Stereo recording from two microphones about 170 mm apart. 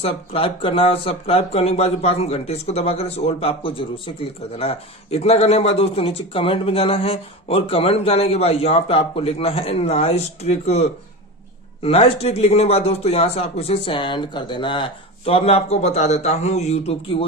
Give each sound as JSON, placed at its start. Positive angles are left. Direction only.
{"t": 0.0, "sound": "speech", "side_deg": 35}